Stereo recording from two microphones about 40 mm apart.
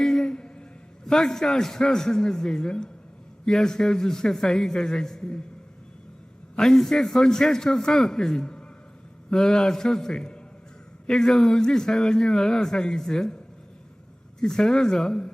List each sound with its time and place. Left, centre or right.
0.0 s a sound: centre
1.0 s a man's voice: centre
6.6 s a man's voice: centre